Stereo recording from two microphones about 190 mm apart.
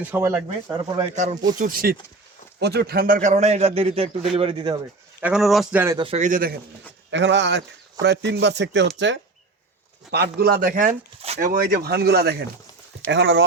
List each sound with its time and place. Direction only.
0.0 s speech: 10° right (ahead or behind)
1.1 s a man's voice: 40° right (ahead or behind)
5.2 s a man's voice: centre (ahead or behind)
6.0 s a man's voice: 35° right (ahead or behind)
7.1 s speech: 70° right (ahead or behind)
10.1 s speech: 60° right (ahead or behind); by 11.3 s 40° right (ahead or behind)
11.3 s speech: 50° right (ahead or behind); by 13.4 s 70° right (ahead or behind)